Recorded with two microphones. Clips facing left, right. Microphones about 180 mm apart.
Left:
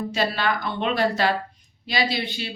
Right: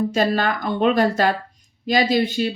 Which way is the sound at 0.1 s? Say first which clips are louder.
Right 4 dB; 45° right (ahead or behind).